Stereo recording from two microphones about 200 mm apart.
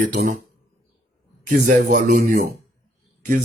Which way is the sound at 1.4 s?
40° right (ahead or behind).